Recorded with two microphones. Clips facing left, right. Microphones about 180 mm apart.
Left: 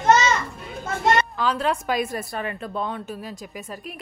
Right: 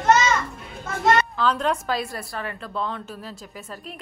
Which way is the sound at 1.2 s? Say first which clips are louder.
Right 1 dB; 10° left (ahead or behind).